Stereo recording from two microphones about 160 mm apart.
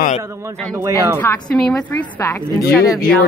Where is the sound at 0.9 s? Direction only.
15° left (ahead or behind).